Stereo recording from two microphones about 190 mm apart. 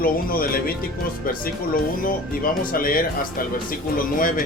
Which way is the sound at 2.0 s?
50° left (ahead or behind).